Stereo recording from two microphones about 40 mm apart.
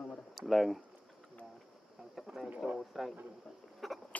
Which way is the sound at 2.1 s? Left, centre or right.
Centre.